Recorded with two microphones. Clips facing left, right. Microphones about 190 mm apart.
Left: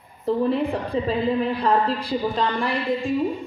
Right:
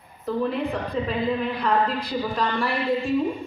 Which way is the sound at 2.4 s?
15° left (ahead or behind).